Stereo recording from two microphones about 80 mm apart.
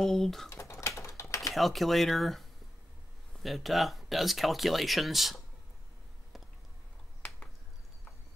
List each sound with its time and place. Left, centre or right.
0.0 s speech: centre
0.5 s typing: left
1.5 s speech: centre
7.2 s a sound: centre